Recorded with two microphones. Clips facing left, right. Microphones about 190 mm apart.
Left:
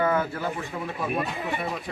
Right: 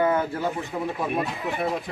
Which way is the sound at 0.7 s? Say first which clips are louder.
Right 4 dB; 30° right (ahead or behind).